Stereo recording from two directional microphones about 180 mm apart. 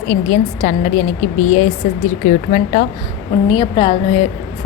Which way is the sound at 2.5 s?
50° left (ahead or behind).